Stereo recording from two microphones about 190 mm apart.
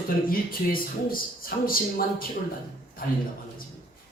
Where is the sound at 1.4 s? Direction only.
50° left (ahead or behind).